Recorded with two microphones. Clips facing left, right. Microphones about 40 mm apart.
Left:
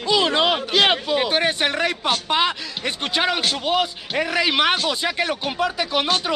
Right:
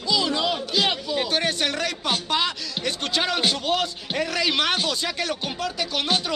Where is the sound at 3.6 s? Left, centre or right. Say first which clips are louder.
Left 3 dB; centre.